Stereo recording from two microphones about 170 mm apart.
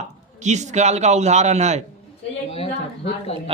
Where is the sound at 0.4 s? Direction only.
45° right (ahead or behind).